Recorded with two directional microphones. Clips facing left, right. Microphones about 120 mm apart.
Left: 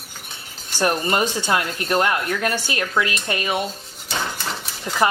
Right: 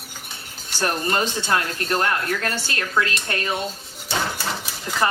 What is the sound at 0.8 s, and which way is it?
Speech, 10° left (ahead or behind).